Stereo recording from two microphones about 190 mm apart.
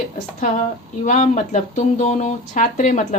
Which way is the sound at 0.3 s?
40° left (ahead or behind).